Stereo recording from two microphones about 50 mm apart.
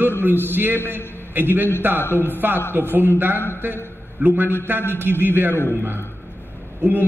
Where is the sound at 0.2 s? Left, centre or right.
Right.